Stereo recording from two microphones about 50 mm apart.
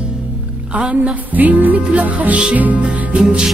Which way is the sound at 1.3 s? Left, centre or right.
Right.